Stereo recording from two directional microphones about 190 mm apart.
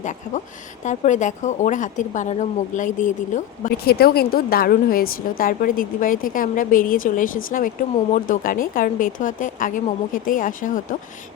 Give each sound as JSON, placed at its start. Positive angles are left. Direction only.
{"t": 0.0, "sound": "speech", "side_deg": 40}